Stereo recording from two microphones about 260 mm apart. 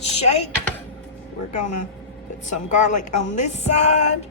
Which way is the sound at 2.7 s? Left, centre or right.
Left.